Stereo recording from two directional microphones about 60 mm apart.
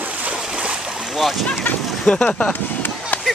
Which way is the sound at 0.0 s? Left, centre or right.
Right.